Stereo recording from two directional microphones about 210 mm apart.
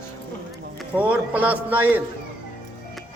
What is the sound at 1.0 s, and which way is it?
A man's voice, 5° right (ahead or behind).